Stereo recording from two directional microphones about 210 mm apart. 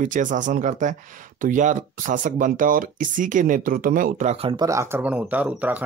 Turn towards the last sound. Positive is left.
turn(degrees=-5)  # may be behind; listen again after turning